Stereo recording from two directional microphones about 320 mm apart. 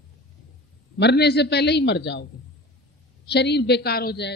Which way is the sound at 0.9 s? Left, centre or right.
Left.